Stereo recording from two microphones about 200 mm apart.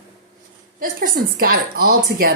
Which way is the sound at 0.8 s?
50° right (ahead or behind).